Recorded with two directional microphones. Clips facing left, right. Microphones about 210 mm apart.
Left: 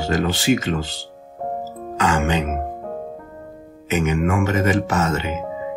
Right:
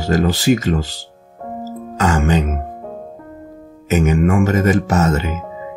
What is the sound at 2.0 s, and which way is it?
Speech, 45° right (ahead or behind).